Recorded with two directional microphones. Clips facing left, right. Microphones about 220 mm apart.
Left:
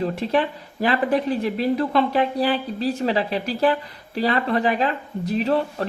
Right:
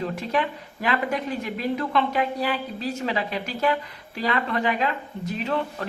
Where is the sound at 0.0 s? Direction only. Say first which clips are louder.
Left 4 dB; 35° left (ahead or behind).